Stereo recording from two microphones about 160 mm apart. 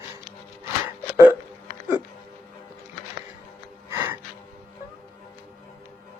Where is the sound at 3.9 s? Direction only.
20° right (ahead or behind).